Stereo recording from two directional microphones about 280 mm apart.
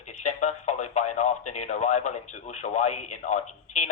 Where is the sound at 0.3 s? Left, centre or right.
Left.